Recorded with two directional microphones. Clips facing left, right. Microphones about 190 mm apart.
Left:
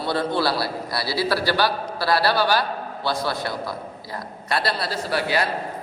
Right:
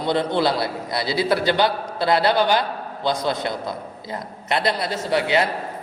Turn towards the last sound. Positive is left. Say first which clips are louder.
# right 3 dB
turn(degrees=-20)  # may be behind; listen again after turning